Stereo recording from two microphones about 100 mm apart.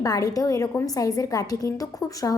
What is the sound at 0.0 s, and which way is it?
A woman's voice, 35° left (ahead or behind).